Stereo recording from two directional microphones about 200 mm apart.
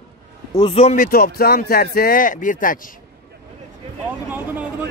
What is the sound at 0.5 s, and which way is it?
Speech, 25° left (ahead or behind).